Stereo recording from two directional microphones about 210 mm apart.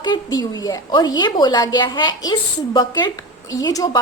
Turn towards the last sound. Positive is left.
turn(degrees=15)  # may be behind; listen again after turning